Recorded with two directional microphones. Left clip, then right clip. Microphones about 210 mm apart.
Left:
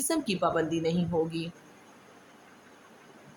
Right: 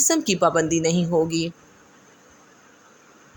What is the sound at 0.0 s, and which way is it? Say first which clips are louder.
Speech: right 9 dB; 35° right (ahead or behind).